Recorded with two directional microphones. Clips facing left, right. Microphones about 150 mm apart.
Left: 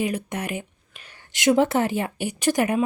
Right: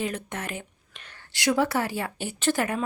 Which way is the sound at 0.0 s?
10° left (ahead or behind).